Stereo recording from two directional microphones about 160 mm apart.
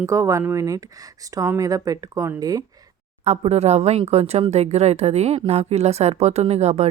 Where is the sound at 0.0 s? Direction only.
20° right (ahead or behind).